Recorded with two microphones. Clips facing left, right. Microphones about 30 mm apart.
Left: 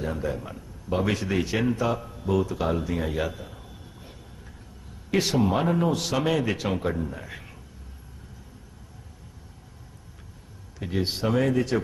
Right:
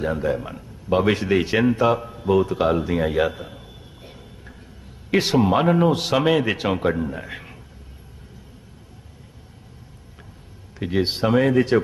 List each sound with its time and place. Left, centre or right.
0.0 s a man's voice: right
10.8 s speech: right